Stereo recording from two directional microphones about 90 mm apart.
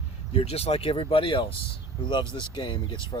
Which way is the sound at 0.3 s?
90° left.